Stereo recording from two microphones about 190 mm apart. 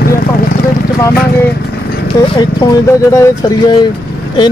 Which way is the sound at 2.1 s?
15° left (ahead or behind).